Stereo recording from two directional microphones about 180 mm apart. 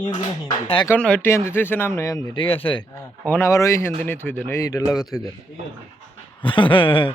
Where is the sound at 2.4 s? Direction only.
30° left (ahead or behind).